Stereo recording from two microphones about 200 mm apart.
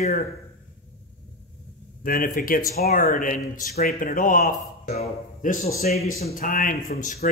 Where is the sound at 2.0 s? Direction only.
45° left (ahead or behind).